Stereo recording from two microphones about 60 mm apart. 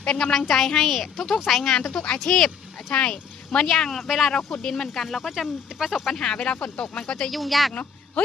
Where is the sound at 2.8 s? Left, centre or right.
Centre.